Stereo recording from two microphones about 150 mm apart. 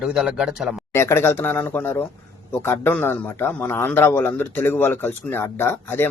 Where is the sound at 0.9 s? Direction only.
15° left (ahead or behind).